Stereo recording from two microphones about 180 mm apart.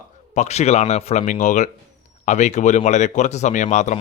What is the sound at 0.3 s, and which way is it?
A man's voice, 35° left (ahead or behind).